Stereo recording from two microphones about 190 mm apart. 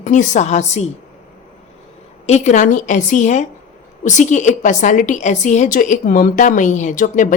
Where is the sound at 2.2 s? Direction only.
35° left (ahead or behind).